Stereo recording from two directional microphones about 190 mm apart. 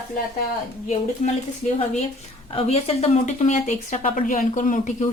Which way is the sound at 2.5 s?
35° left (ahead or behind).